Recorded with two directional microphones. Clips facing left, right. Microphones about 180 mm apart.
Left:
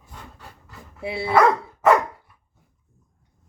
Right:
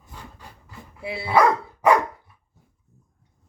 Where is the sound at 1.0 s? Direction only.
25° left (ahead or behind).